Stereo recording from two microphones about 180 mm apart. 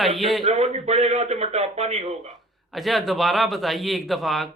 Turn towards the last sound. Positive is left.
turn(degrees=0)  # may be behind; listen again after turning